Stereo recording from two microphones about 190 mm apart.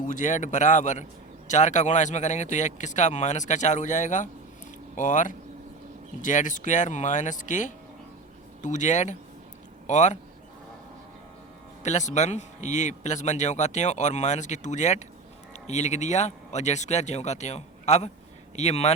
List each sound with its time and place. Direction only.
0.0 s speech: 40° left (ahead or behind)
11.8 s speech: 40° left (ahead or behind)